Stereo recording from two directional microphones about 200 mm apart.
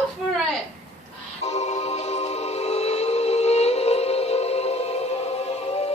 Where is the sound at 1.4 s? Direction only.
35° left (ahead or behind).